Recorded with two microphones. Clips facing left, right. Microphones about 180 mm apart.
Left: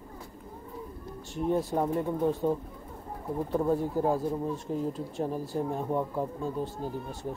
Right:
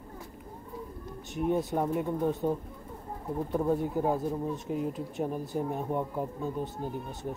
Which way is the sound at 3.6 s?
Centre (ahead or behind).